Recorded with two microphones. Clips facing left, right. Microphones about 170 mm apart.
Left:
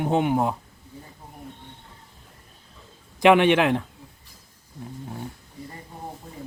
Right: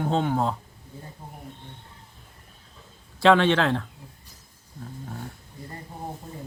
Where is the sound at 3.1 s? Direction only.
15° left (ahead or behind).